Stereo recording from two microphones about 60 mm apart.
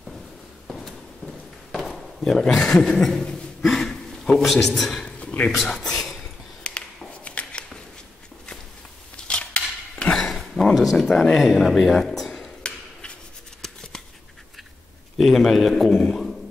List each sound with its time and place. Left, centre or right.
0.7 s walk: centre
2.6 s a man's voice: centre
5.2 s a sound: left
5.5 s a man's voice: centre
6.7 s a sound: centre
9.1 s cutlery: centre
10.1 s a sound: centre
13.6 s scissors: centre
15.1 s a man's voice: centre